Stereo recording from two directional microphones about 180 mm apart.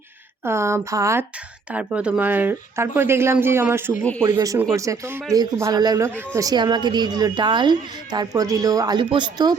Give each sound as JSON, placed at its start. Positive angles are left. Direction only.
{"t": 0.4, "sound": "speech", "side_deg": -15}
{"t": 4.2, "sound": "speech", "side_deg": -25}